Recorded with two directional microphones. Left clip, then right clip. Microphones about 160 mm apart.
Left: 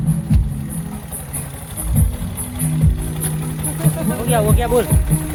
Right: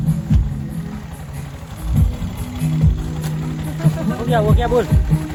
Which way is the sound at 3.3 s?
90° left.